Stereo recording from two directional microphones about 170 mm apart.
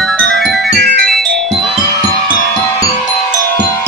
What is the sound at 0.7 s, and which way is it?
Music, 75° right (ahead or behind).